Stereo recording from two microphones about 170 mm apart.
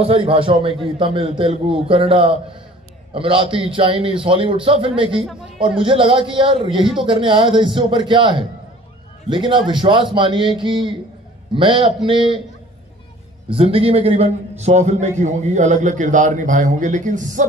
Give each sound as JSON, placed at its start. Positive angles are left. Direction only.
{"t": 0.0, "sound": "a man's voice", "side_deg": -30}
{"t": 13.5, "sound": "a man's voice", "side_deg": -35}